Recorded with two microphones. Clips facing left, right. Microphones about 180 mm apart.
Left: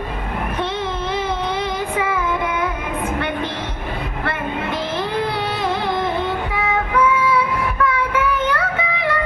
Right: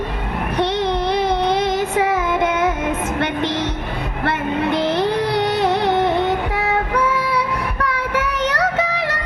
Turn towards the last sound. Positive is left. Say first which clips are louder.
# left 2 dB
turn(degrees=-75)  # may be behind; listen again after turning